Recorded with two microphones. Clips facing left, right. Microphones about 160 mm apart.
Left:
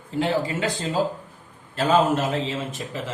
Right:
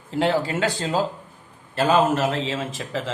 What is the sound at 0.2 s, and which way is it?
Speech, 85° right.